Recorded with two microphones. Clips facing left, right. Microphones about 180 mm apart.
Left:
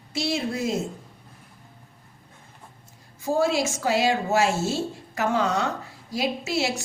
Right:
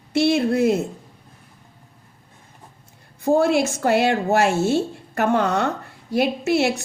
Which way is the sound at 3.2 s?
60° right (ahead or behind).